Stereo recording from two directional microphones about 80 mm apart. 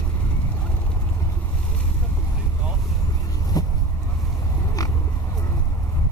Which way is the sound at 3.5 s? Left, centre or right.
Left.